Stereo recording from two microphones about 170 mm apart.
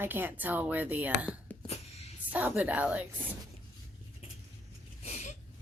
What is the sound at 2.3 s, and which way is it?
Speech, 10° right (ahead or behind).